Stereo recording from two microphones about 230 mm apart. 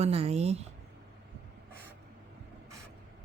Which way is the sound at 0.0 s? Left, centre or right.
Right.